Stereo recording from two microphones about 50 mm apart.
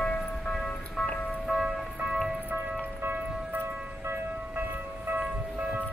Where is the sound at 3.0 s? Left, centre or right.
Right.